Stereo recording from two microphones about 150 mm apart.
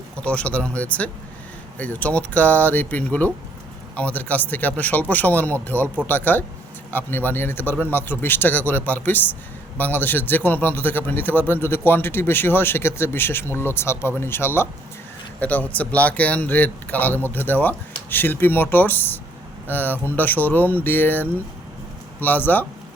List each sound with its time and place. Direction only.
0.2 s a man's voice: 10° left (ahead or behind)